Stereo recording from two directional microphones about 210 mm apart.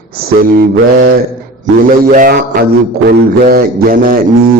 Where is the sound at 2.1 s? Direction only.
40° right (ahead or behind).